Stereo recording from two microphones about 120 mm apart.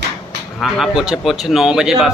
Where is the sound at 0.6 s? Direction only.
5° right (ahead or behind).